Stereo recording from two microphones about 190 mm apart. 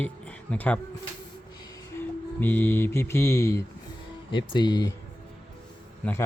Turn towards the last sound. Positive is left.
turn(degrees=10)  # may be behind; listen again after turning